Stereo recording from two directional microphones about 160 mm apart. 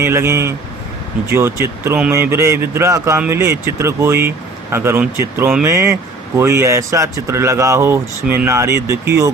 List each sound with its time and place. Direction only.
0.0 s speech: 15° right (ahead or behind)